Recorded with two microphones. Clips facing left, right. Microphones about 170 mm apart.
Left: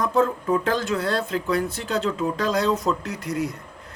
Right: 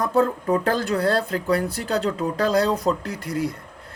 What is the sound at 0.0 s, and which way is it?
Speech, 35° right (ahead or behind).